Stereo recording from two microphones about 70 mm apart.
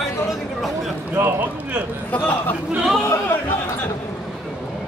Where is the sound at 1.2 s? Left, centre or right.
Right.